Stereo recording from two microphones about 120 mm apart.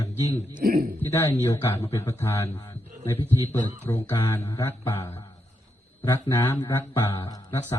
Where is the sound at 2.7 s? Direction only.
20° left (ahead or behind).